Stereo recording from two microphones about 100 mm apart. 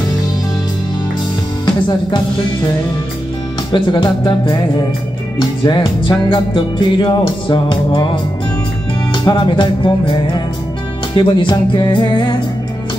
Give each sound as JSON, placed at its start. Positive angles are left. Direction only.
{"t": 1.9, "sound": "speech", "side_deg": 50}
{"t": 3.7, "sound": "speech", "side_deg": 50}
{"t": 5.6, "sound": "music", "side_deg": 55}
{"t": 9.3, "sound": "speech", "side_deg": 50}